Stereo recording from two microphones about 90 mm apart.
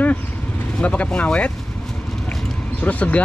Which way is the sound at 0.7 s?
15° left (ahead or behind).